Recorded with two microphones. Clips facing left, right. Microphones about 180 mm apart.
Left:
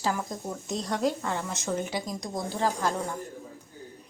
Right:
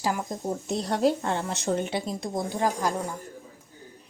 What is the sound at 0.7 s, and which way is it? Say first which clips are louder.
A woman's voice: right 4 dB; 30° right (ahead or behind).